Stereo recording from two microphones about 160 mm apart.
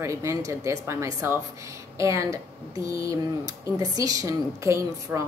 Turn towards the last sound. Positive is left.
turn(degrees=-20)  # may be behind; listen again after turning